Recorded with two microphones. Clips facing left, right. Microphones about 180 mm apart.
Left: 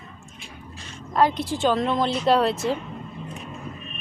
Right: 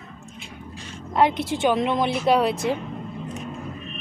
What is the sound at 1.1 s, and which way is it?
Speech, 20° right (ahead or behind).